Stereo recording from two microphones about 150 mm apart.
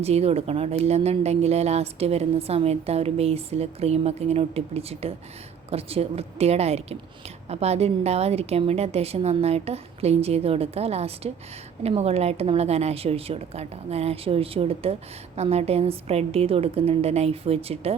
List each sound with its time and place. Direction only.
0.0 s a woman's voice: 45° right (ahead or behind)